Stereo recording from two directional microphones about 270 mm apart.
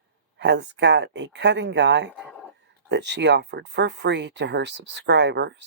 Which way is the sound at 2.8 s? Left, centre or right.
Right.